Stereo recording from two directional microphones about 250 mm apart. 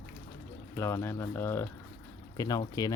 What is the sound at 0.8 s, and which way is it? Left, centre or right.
Speech, centre.